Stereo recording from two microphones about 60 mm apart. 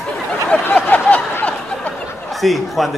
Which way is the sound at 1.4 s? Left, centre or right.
Centre.